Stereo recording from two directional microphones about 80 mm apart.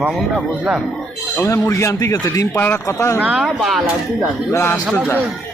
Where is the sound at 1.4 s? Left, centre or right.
Left.